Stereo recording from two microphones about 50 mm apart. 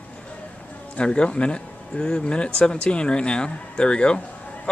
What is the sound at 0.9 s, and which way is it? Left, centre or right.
Speech, centre.